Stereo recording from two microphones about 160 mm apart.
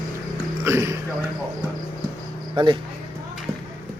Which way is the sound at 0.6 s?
15° right (ahead or behind).